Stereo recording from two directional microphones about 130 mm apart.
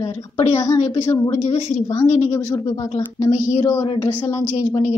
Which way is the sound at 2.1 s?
45° left (ahead or behind).